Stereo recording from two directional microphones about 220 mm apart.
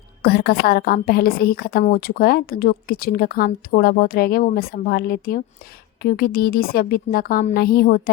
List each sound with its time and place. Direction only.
0.2 s a woman's voice: 45° left (ahead or behind)